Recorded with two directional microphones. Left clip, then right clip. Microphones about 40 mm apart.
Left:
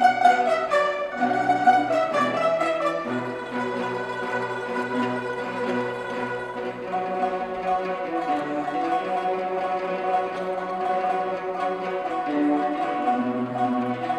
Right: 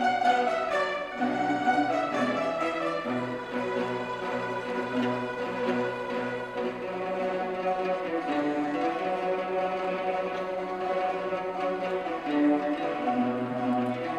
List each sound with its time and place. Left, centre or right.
0.0 s music: left